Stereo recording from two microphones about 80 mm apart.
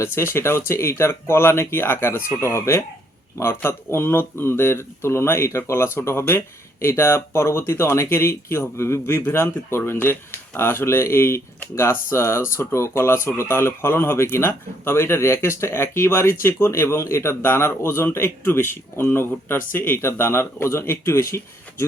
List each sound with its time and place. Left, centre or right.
0.0 s speech: left